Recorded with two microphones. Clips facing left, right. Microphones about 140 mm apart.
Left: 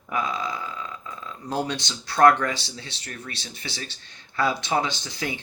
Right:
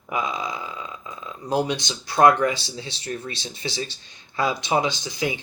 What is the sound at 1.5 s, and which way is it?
Speech, 15° right (ahead or behind).